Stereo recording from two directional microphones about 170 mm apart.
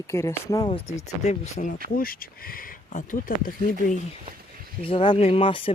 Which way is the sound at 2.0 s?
60° left (ahead or behind).